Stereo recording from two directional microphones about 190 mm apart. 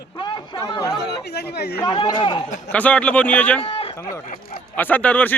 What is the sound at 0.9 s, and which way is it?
Speech, 60° left (ahead or behind).